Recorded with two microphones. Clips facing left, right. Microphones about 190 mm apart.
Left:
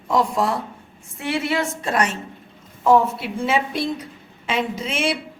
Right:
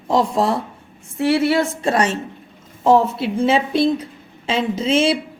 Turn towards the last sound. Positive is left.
turn(degrees=-25)  # may be behind; listen again after turning